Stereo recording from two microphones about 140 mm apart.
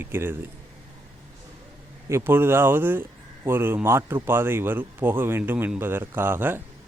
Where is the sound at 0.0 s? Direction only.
15° right (ahead or behind).